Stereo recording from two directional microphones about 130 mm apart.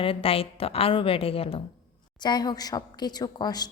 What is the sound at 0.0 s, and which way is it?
A woman's voice, 45° left (ahead or behind).